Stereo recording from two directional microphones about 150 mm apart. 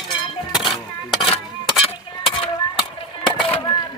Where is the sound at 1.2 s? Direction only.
35° left (ahead or behind).